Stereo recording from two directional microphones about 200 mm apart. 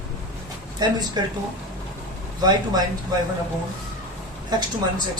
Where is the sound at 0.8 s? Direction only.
20° right (ahead or behind).